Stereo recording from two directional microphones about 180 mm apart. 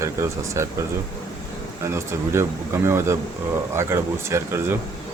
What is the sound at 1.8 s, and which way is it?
Speech, 15° right (ahead or behind).